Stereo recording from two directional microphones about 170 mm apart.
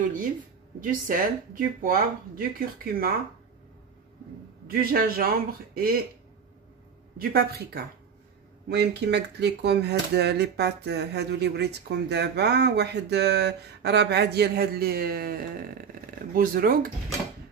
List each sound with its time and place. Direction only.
0.0 s speech: 50° right (ahead or behind)
4.6 s speech: 60° right (ahead or behind)
7.2 s speech: 65° right (ahead or behind)
8.6 s speech: 80° right; by 16.9 s 55° right (ahead or behind)